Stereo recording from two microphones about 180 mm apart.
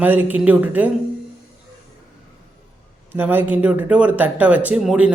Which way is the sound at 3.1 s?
10° right (ahead or behind).